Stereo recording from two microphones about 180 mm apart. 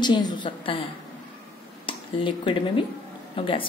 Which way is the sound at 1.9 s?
30° left (ahead or behind).